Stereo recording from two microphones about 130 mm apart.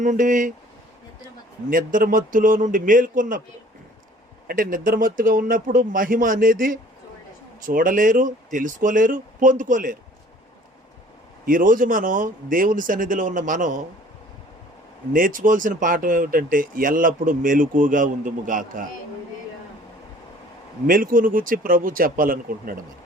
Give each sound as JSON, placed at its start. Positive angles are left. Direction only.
{"t": 0.0, "sound": "speech", "side_deg": -75}
{"t": 1.7, "sound": "speech", "side_deg": -90}
{"t": 4.5, "sound": "speech", "side_deg": -90}
{"t": 11.4, "sound": "speech", "side_deg": -90}
{"t": 15.1, "sound": "speech", "side_deg": -90}
{"t": 20.8, "sound": "speech", "side_deg": -90}